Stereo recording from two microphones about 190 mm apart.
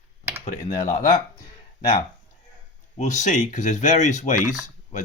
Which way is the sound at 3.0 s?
40° left (ahead or behind).